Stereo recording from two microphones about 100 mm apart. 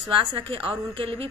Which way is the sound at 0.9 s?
65° right (ahead or behind).